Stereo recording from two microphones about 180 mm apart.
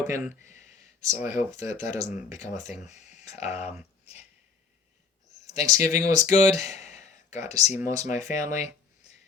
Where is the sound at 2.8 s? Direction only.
40° left (ahead or behind).